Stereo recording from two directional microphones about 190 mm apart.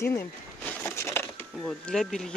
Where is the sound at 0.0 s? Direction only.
10° left (ahead or behind).